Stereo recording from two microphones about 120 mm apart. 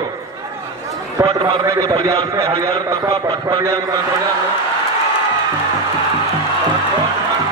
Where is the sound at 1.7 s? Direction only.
30° right (ahead or behind).